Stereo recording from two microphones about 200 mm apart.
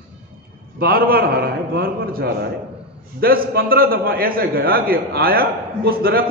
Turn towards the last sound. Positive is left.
turn(degrees=-50)  # may be behind; listen again after turning